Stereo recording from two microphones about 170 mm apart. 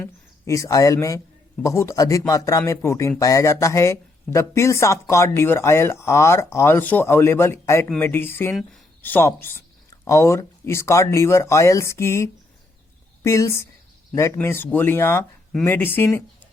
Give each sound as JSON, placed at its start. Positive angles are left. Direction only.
{"t": 0.4, "sound": "speech", "side_deg": 20}